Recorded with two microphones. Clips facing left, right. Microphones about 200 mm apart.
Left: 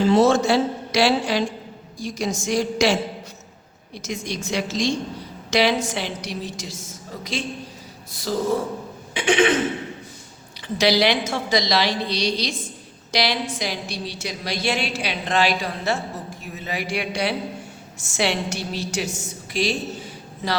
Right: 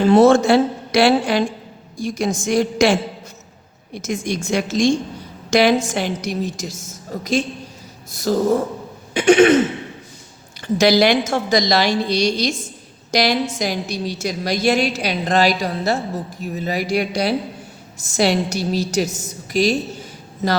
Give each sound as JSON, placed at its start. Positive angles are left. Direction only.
{"t": 0.0, "sound": "a woman's voice", "side_deg": -55}
{"t": 10.8, "sound": "a woman's voice", "side_deg": -45}